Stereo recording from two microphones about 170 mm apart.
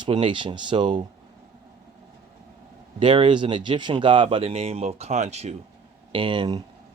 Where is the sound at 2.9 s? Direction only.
30° right (ahead or behind).